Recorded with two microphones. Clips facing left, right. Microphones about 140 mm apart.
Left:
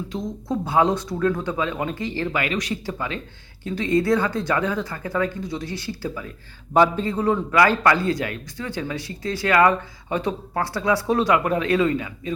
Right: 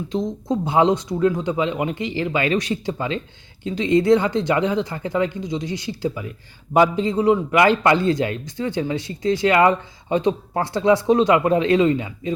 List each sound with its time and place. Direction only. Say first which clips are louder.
0.1 s a man's voice: right 6 dB; 20° right (ahead or behind)
2.4 s a man's voice: right 5 dB; 25° right (ahead or behind)